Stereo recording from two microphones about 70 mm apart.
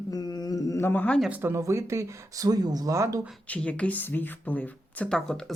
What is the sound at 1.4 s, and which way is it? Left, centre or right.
Speech, right.